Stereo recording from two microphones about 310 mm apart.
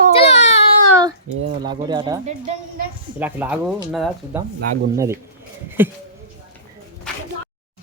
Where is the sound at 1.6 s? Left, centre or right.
Centre.